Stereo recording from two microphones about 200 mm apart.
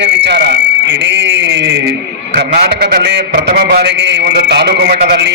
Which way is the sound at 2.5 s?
50° right (ahead or behind).